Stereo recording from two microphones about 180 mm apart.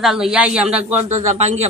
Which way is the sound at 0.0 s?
Centre (ahead or behind).